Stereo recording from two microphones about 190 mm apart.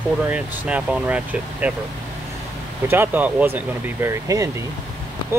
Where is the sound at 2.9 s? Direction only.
10° right (ahead or behind).